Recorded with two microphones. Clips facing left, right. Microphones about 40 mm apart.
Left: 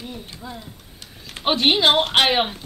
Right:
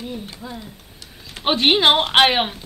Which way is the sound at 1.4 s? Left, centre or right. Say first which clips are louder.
Right 2 dB; centre.